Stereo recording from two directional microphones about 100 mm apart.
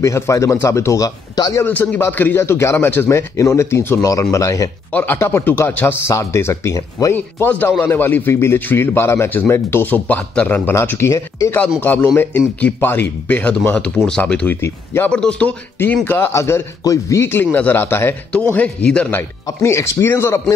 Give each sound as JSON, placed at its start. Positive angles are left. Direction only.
{"t": 0.0, "sound": "a man's voice", "side_deg": 30}
{"t": 1.6, "sound": "speech", "side_deg": 15}
{"t": 4.9, "sound": "speech", "side_deg": 20}
{"t": 7.3, "sound": "speech", "side_deg": 20}
{"t": 11.8, "sound": "speech", "side_deg": 20}
{"t": 15.0, "sound": "a man's voice", "side_deg": 10}
{"t": 15.8, "sound": "a man's voice", "side_deg": 20}
{"t": 19.4, "sound": "speech", "side_deg": 30}